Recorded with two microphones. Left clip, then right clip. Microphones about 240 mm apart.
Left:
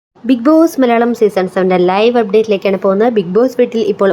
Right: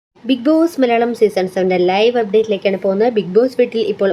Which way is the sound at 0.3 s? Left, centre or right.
Centre.